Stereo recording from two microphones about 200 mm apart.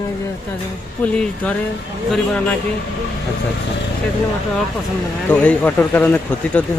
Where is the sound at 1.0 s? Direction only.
5° left (ahead or behind).